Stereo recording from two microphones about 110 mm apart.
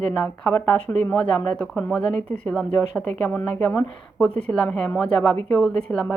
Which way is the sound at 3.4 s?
25° left (ahead or behind).